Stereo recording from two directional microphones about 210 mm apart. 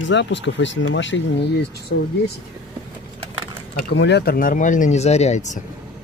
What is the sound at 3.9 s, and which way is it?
Speech, 55° left (ahead or behind).